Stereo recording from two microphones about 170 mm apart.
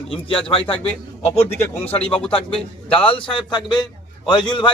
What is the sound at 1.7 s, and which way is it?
Speech, 10° left (ahead or behind).